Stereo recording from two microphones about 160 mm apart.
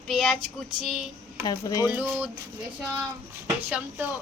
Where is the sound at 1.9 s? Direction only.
10° right (ahead or behind).